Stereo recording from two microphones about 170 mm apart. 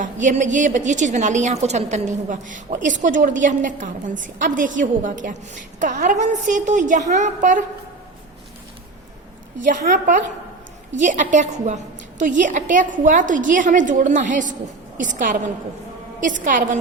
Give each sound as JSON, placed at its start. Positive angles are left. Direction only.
{"t": 0.0, "sound": "a woman's voice", "side_deg": -50}
{"t": 9.6, "sound": "a woman's voice", "side_deg": -50}